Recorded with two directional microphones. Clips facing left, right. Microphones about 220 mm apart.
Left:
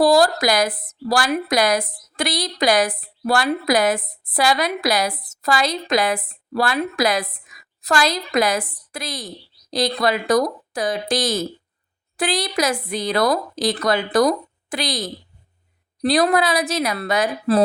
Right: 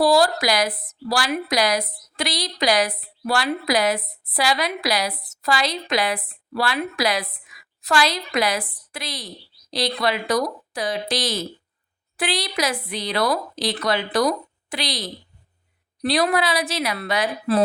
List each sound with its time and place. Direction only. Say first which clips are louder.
0.0 s a woman's voice: left 2 dB; 45° left (ahead or behind)